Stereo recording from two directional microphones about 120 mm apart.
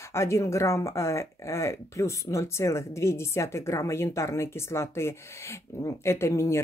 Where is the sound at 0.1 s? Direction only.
25° left (ahead or behind).